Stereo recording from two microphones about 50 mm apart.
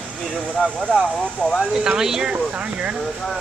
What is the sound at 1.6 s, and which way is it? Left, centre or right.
Speech, centre.